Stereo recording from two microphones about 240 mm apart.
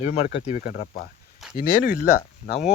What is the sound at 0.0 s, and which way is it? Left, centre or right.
Speech, left.